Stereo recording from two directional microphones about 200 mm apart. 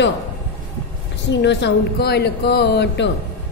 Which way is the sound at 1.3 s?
60° left (ahead or behind).